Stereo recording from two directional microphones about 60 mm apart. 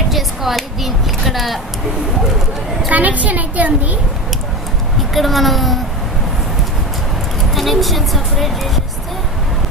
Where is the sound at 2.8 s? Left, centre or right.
Right.